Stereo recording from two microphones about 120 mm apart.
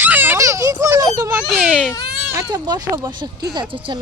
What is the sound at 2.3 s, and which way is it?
Speech, 30° right (ahead or behind).